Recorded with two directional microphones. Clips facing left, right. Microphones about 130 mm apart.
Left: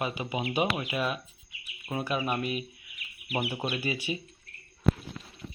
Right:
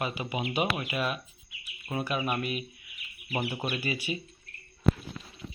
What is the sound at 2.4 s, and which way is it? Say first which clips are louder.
Speech: left 1 dB; 30° left (ahead or behind).